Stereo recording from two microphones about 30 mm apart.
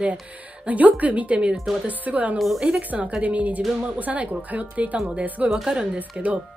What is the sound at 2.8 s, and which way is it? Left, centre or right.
Speech, right.